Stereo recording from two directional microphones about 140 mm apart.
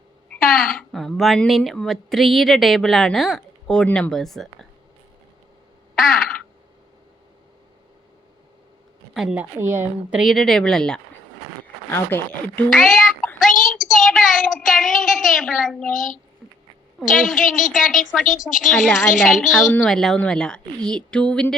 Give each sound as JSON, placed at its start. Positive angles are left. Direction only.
{"t": 0.3, "sound": "speech", "side_deg": 5}
{"t": 5.9, "sound": "quack", "side_deg": 0}
{"t": 9.1, "sound": "a woman's voice", "side_deg": -5}
{"t": 10.2, "sound": "a woman's voice", "side_deg": 0}
{"t": 11.9, "sound": "speech", "side_deg": 15}
{"t": 12.7, "sound": "child singing", "side_deg": 0}
{"t": 13.5, "sound": "a sound", "side_deg": 75}
{"t": 13.9, "sound": "a sound", "side_deg": 0}
{"t": 15.3, "sound": "a woman's voice", "side_deg": 0}
{"t": 15.9, "sound": "a child's voice", "side_deg": 70}
{"t": 17.2, "sound": "a woman's voice", "side_deg": 0}